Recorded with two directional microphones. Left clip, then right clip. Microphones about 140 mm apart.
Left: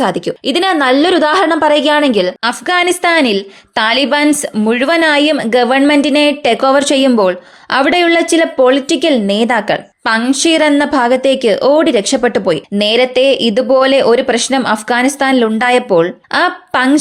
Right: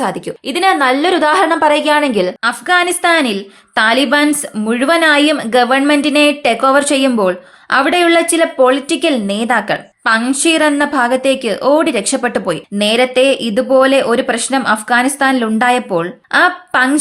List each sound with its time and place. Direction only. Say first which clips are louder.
0.0 s speech: left 4 dB; 40° left (ahead or behind)